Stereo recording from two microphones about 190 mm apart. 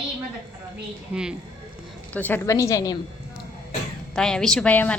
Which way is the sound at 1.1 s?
5° right (ahead or behind).